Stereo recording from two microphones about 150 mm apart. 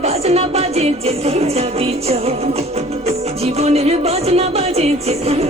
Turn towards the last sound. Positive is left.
turn(degrees=-45)  # may be behind; listen again after turning